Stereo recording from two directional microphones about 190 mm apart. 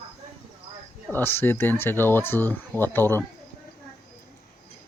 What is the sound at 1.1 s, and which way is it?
Speech, 10° left (ahead or behind).